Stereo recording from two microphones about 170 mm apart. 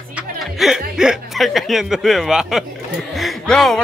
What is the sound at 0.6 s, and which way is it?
Speech, 5° right (ahead or behind).